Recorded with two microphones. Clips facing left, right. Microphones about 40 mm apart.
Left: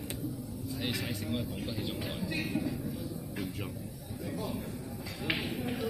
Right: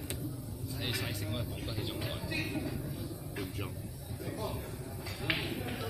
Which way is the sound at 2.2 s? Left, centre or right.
Centre.